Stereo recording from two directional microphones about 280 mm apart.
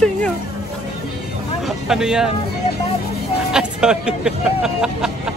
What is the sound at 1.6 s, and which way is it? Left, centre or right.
Speech, centre.